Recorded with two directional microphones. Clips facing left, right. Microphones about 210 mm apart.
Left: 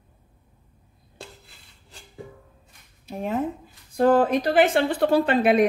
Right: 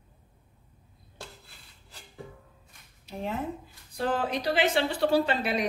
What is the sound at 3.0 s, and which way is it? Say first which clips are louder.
Speech: left 6 dB; 45° left (ahead or behind).